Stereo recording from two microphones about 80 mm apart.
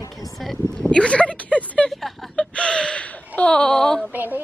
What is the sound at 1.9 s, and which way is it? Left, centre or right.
Speech, centre.